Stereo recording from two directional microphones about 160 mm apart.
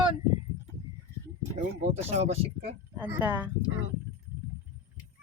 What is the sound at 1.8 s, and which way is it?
Speech, 40° right (ahead or behind).